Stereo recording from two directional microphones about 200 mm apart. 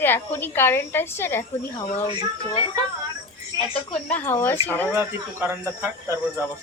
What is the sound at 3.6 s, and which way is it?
Speech, 30° left (ahead or behind).